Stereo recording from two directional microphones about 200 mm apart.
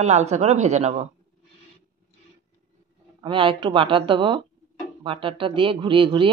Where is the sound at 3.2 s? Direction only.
25° right (ahead or behind).